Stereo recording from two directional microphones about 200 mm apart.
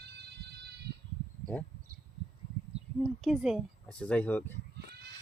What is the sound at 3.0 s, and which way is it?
Speech, centre (ahead or behind).